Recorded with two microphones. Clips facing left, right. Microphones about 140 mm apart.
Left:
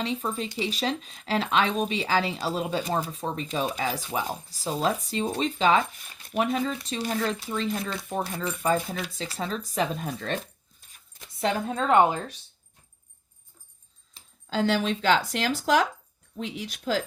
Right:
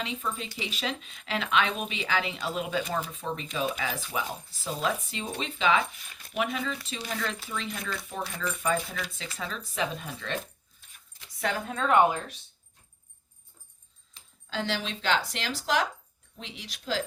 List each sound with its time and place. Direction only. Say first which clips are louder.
0.0 s speech: left 5 dB; 35° left (ahead or behind)
11.3 s a woman's voice: left 4 dB; 25° left (ahead or behind)
14.1 s speech: left 6 dB; 40° left (ahead or behind)